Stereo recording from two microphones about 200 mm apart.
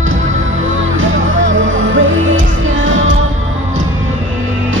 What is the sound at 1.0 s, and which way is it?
Music, 75° right (ahead or behind).